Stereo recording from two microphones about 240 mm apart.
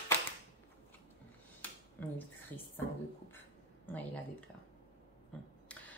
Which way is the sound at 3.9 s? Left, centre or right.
Centre.